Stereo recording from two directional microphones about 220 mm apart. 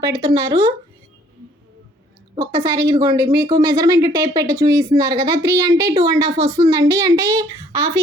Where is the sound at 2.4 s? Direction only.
20° right (ahead or behind).